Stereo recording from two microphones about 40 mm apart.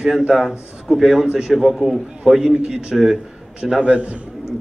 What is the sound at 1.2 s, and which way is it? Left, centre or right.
Speech, right.